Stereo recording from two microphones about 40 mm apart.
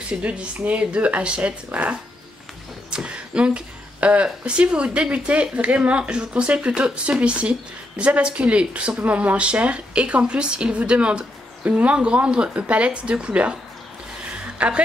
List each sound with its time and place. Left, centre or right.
0.2 s speech: right
2.9 s a woman's voice: right
14.4 s a sound: right